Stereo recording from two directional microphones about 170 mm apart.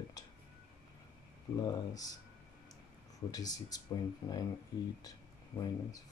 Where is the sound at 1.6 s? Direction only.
20° left (ahead or behind).